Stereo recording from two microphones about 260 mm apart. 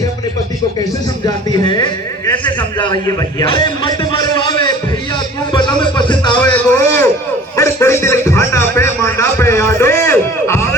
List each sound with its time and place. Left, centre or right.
1.2 s a man's voice: centre
3.4 s a sound: centre
5.5 s a man's voice: centre
7.5 s music: centre